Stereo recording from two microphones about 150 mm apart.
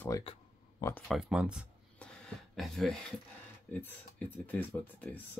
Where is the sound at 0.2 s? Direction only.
35° left (ahead or behind).